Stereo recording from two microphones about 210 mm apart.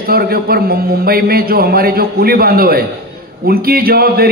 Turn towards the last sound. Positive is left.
turn(degrees=-45)  # may be behind; listen again after turning